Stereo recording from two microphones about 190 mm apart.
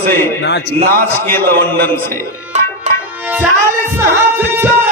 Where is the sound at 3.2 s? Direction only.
10° right (ahead or behind).